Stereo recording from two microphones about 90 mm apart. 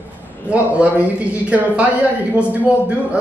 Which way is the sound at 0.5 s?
15° right (ahead or behind).